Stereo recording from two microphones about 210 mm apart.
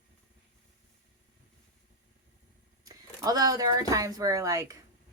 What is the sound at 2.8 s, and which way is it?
Speech, 15° right (ahead or behind).